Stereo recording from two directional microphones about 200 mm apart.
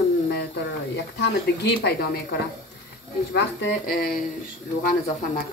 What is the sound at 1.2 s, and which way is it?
A woman's voice, 55° left (ahead or behind).